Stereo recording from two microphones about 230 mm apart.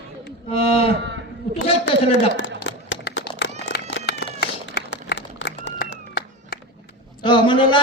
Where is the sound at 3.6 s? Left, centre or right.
Left.